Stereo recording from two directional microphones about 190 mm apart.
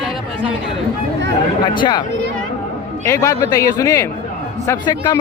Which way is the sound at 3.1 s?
15° left (ahead or behind).